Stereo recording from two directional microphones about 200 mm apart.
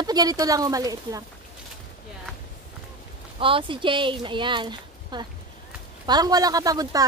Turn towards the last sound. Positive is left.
turn(degrees=-20)  # may be behind; listen again after turning